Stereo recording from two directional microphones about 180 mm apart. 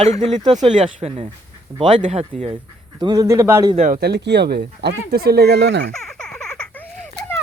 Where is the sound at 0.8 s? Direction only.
35° right (ahead or behind).